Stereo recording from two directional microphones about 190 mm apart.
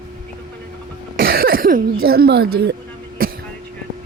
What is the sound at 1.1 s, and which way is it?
Speech, 55° right (ahead or behind).